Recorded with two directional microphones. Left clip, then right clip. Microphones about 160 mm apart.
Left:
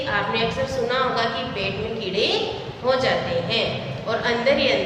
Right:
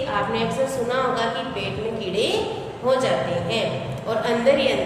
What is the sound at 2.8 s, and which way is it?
A woman's voice, 20° right (ahead or behind).